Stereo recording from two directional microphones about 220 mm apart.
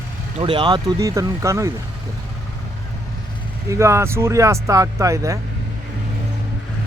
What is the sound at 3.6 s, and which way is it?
Speech, 15° right (ahead or behind).